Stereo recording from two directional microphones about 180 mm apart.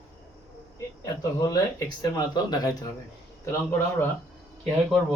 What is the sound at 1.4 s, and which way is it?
Speech, 20° left (ahead or behind).